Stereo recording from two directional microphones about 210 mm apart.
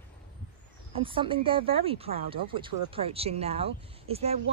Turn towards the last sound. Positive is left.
turn(degrees=-30)  # may be behind; listen again after turning